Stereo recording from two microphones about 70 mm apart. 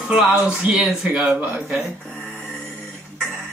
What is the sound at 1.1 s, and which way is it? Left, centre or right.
Speech, centre.